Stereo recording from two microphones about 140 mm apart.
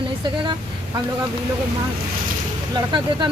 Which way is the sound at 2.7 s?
35° right (ahead or behind).